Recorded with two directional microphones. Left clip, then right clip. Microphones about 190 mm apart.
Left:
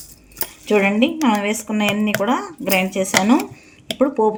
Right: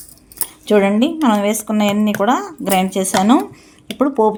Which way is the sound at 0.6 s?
45° right (ahead or behind).